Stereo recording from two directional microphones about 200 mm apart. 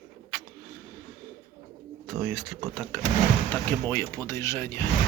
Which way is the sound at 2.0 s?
Centre (ahead or behind).